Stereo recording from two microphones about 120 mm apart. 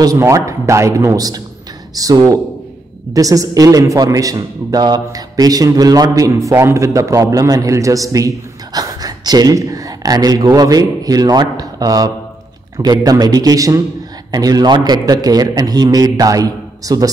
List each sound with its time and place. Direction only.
0.0 s a man's voice: 30° right (ahead or behind)